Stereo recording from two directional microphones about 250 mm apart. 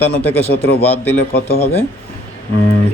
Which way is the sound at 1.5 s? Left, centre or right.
Left.